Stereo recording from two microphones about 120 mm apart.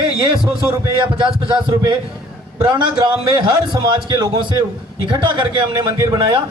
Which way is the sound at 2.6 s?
40° right (ahead or behind).